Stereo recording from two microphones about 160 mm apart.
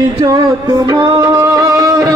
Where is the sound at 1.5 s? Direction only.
20° right (ahead or behind).